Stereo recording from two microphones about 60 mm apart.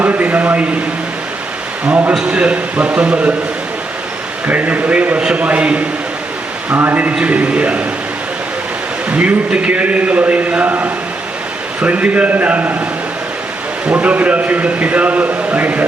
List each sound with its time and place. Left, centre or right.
0.0 s a sound: right
1.8 s a sound: right
2.2 s a man's voice: centre
4.4 s a man's voice: right
6.7 s a man's voice: right
9.0 s a man's voice: right
13.8 s a man's voice: right